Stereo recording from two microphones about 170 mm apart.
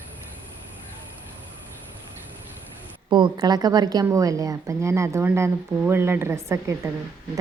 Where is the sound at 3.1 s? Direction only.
25° right (ahead or behind).